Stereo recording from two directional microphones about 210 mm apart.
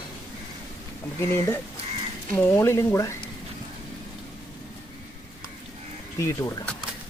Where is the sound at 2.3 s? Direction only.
10° left (ahead or behind).